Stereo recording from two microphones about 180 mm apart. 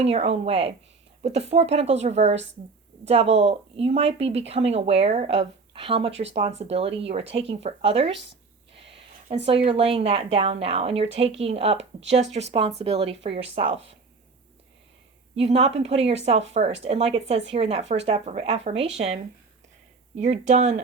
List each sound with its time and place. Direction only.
0.0 s speech: 35° right (ahead or behind)
8.7 s a sound: 30° right (ahead or behind)
9.6 s speech: 30° right (ahead or behind)
15.4 s speech: 35° right (ahead or behind)